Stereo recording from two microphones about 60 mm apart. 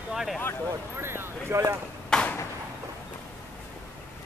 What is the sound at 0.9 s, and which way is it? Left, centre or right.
Speech, right.